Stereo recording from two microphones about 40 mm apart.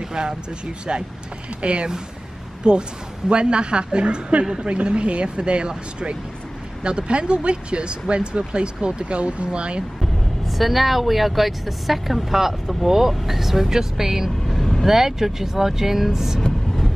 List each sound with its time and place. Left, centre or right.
0.1 s speech: right
1.6 s speech: right
10.4 s speech: centre
14.5 s vehicle: centre
14.9 s speech: centre